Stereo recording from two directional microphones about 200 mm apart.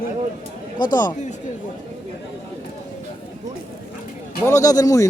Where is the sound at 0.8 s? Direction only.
20° left (ahead or behind).